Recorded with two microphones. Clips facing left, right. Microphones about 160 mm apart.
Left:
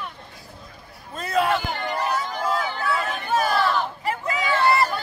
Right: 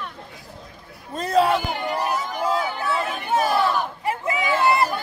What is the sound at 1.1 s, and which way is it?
Speech, 35° right (ahead or behind).